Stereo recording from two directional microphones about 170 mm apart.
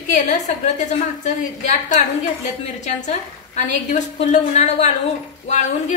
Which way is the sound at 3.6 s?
45° left (ahead or behind).